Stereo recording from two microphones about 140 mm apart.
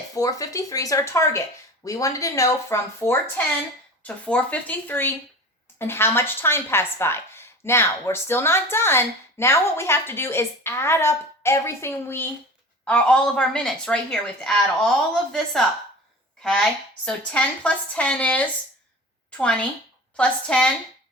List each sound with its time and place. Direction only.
0.1 s a woman's voice: 25° left (ahead or behind)
20.1 s a woman's voice: 5° left (ahead or behind)